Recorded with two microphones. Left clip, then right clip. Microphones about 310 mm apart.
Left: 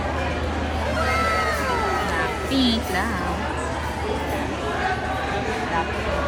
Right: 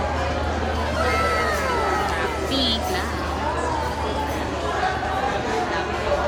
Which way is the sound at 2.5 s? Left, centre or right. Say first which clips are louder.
Left 1 dB; centre.